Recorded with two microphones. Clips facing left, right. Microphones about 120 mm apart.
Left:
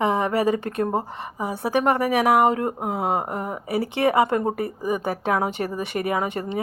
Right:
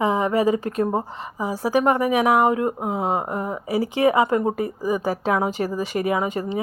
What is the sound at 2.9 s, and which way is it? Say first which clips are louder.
Speech: right 1 dB; 60° left (ahead or behind).